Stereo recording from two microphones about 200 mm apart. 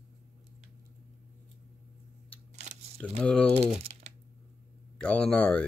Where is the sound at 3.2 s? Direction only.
5° left (ahead or behind).